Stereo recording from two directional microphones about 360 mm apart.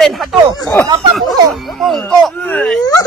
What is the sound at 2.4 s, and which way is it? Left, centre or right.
Speech, centre.